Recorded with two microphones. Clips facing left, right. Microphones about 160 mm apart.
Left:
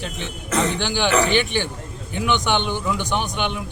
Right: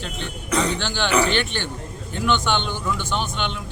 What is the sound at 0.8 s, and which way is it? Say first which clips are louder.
A man's voice: left 2 dB; 15° left (ahead or behind).